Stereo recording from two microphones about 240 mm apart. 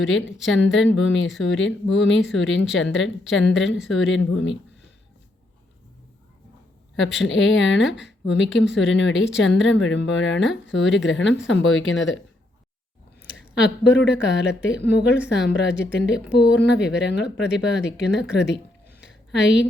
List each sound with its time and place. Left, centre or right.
0.0 s speech: left
7.2 s speech: left
13.6 s speech: left